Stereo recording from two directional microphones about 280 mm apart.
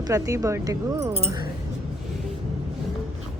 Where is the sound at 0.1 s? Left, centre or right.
Centre.